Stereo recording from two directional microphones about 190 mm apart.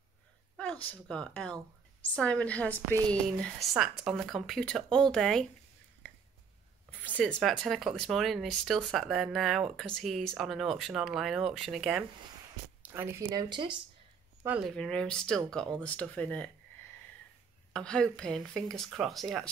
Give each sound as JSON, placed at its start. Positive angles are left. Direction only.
{"t": 0.8, "sound": "speech", "side_deg": 5}
{"t": 6.0, "sound": "a sound", "side_deg": 10}
{"t": 7.2, "sound": "speech", "side_deg": 5}
{"t": 12.8, "sound": "speech", "side_deg": -10}
{"t": 13.3, "sound": "speech", "side_deg": -25}
{"t": 14.4, "sound": "speech", "side_deg": -10}
{"t": 14.7, "sound": "speech", "side_deg": 5}
{"t": 17.7, "sound": "speech", "side_deg": 5}